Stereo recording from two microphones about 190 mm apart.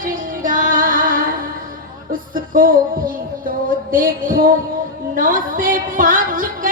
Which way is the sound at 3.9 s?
45° right (ahead or behind).